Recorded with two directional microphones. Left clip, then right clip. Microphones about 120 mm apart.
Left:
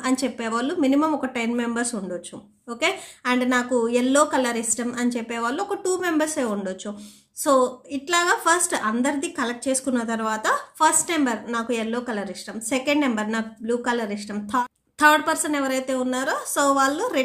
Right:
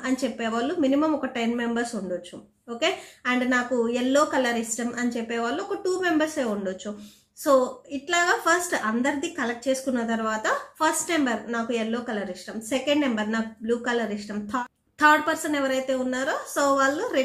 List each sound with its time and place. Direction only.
0.0 s a woman's voice: 40° left (ahead or behind)